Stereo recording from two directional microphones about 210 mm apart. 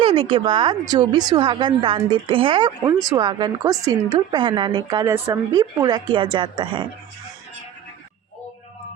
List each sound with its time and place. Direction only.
0.0 s speech: 25° right (ahead or behind)